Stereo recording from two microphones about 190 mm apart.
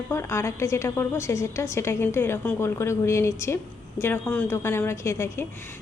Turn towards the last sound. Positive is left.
turn(degrees=15)  # may be behind; listen again after turning